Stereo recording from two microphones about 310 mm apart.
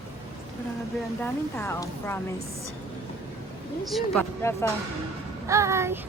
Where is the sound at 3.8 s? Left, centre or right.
Centre.